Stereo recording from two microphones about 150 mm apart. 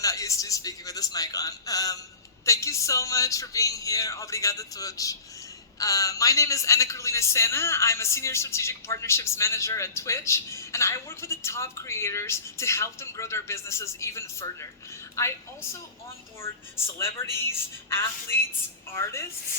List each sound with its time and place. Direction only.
0.0 s a woman's voice: 20° left (ahead or behind)
16.4 s a woman's voice: 15° left (ahead or behind)